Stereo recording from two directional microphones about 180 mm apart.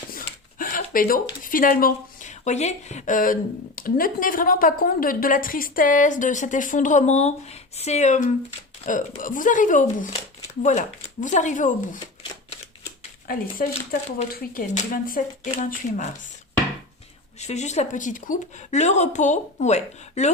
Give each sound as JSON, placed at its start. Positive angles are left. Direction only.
{"t": 0.1, "sound": "a sound", "side_deg": 50}
{"t": 3.8, "sound": "a woman's voice", "side_deg": 50}
{"t": 13.0, "sound": "a sound", "side_deg": 50}
{"t": 13.7, "sound": "a woman's voice", "side_deg": 40}
{"t": 14.3, "sound": "a woman's voice", "side_deg": 50}
{"t": 15.5, "sound": "a woman's voice", "side_deg": 40}
{"t": 17.4, "sound": "a woman's voice", "side_deg": 40}